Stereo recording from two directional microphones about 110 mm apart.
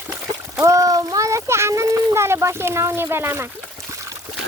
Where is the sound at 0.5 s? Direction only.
30° right (ahead or behind).